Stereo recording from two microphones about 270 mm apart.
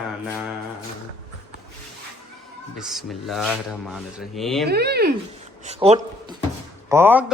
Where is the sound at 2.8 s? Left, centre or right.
Centre.